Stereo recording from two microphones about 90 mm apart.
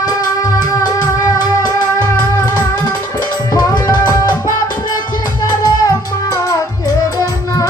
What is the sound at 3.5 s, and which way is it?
Tabla, 45° left (ahead or behind).